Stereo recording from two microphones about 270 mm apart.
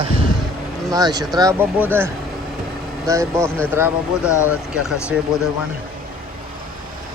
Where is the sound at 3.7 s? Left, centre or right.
Centre.